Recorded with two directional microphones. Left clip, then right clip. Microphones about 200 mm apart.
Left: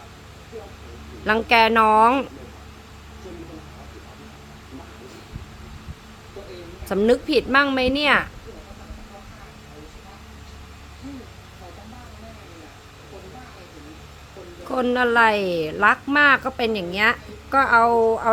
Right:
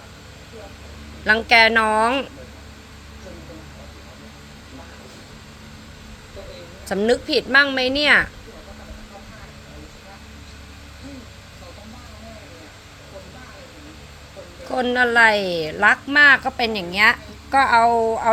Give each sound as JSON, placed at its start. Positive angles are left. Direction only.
{"t": 1.2, "sound": "a woman's voice", "side_deg": 20}
{"t": 6.8, "sound": "a woman's voice", "side_deg": 20}
{"t": 14.7, "sound": "a woman's voice", "side_deg": 20}